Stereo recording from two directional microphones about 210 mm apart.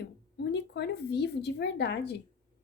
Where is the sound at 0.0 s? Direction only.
55° left (ahead or behind).